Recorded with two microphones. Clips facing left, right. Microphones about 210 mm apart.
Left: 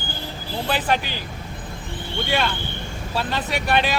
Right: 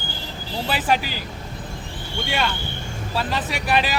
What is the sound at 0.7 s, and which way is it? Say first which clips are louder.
Speech: even; 5° right (ahead or behind).